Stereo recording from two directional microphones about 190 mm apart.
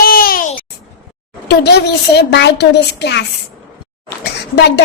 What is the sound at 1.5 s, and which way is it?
A woman's voice, 60° left (ahead or behind).